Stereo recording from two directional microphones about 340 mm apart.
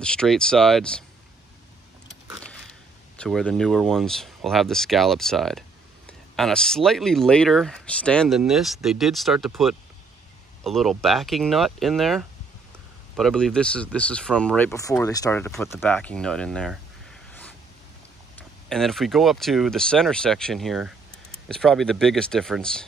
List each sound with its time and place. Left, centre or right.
0.0 s speech: centre
2.2 s biting: centre
3.2 s speech: centre
17.3 s a sound: centre
18.7 s speech: centre